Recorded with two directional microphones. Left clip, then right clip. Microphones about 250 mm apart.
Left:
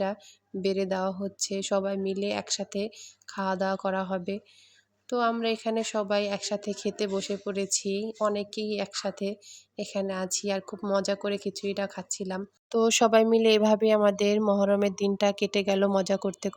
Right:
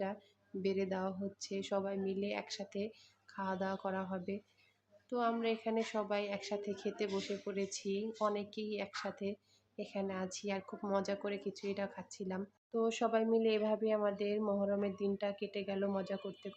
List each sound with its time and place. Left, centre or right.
0.6 s speech: left